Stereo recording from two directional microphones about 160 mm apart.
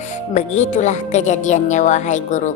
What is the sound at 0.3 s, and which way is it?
A woman's voice, 45° left (ahead or behind).